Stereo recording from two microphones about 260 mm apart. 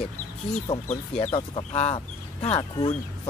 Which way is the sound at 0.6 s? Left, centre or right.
Centre.